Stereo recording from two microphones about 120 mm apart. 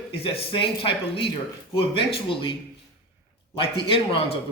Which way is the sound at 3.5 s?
50° left (ahead or behind).